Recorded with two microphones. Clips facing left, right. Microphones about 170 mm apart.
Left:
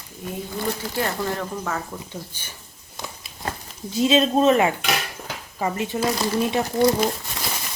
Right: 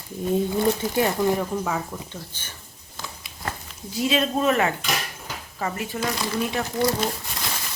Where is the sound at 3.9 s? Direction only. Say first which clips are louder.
Left 5 dB; 25° left (ahead or behind).